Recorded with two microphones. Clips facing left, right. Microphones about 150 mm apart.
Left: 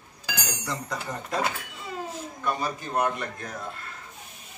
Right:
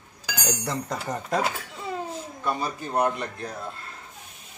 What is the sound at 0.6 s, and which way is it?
Speech, 50° right (ahead or behind).